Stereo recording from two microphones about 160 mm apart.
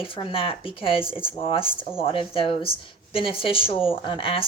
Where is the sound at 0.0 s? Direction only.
35° left (ahead or behind).